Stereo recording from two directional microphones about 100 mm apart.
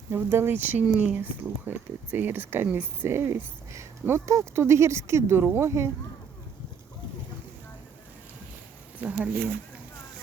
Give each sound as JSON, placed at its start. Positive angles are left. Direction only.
{"t": 0.1, "sound": "speech", "side_deg": -25}
{"t": 9.0, "sound": "speech", "side_deg": -15}